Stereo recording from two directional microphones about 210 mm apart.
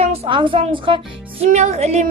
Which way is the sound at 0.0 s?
30° right (ahead or behind).